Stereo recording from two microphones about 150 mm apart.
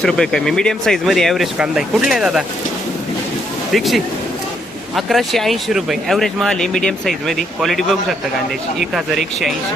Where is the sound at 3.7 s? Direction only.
Centre (ahead or behind).